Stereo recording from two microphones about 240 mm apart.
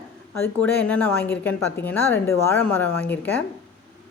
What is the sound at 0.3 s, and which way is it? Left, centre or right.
A woman's voice, centre.